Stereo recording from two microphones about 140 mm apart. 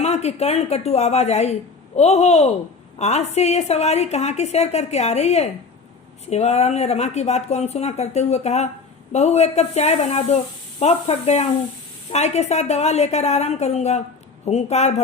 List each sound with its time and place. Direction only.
0.0 s a woman's voice: 50° left (ahead or behind)